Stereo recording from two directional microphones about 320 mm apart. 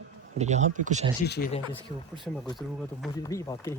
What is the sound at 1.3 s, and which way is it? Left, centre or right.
Speech, left.